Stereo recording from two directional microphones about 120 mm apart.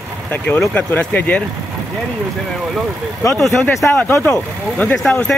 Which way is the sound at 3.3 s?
5° left (ahead or behind).